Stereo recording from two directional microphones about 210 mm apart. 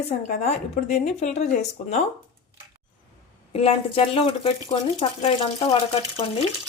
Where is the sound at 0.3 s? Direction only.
30° left (ahead or behind).